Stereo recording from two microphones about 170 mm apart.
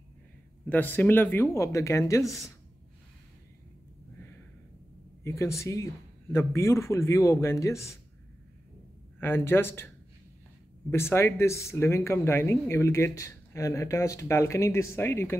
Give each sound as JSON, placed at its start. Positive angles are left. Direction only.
{"t": 0.7, "sound": "speech", "side_deg": 10}
{"t": 5.2, "sound": "speech", "side_deg": 15}
{"t": 9.2, "sound": "speech", "side_deg": 15}
{"t": 10.9, "sound": "speech", "side_deg": 15}